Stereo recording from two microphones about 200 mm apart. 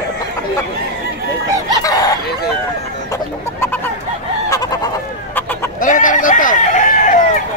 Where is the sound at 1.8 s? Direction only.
20° left (ahead or behind).